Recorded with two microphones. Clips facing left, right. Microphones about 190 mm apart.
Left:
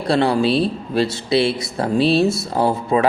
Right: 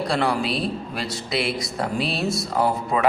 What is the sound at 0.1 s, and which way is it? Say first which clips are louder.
Speech: left 9 dB; 30° left (ahead or behind).